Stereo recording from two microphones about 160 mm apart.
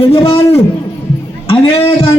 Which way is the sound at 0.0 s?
35° left (ahead or behind).